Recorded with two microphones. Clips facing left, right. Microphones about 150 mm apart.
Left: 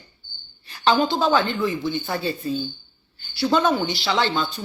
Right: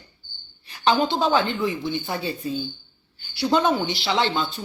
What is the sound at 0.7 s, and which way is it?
A woman's voice, 15° right (ahead or behind).